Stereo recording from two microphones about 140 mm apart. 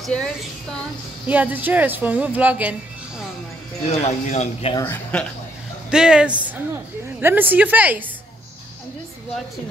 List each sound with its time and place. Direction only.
0.0 s a woman's voice: centre (ahead or behind)
1.2 s a woman's voice: 10° right (ahead or behind)
3.8 s speech: 50° left (ahead or behind)
4.7 s speech: 15° left (ahead or behind)
5.9 s a woman's voice: 5° right (ahead or behind)